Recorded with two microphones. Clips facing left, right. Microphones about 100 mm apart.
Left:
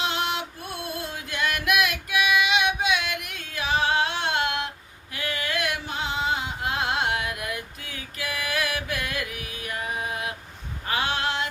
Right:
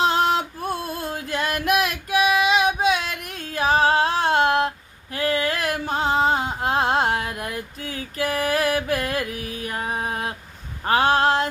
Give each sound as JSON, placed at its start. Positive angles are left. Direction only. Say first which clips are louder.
{"t": 0.0, "sound": "female singing", "louder": "right 8 dB", "side_deg": -40}
{"t": 5.1, "sound": "carnatic music", "louder": "right 7 dB", "side_deg": -40}
{"t": 10.8, "sound": "a sound", "louder": "right 9 dB", "side_deg": -40}